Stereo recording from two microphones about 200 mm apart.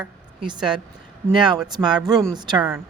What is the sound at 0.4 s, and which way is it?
Speech, 25° right (ahead or behind).